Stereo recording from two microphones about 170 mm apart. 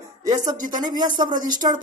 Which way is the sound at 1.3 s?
50° right (ahead or behind).